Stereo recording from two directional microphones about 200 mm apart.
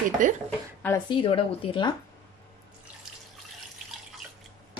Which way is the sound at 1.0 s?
25° left (ahead or behind).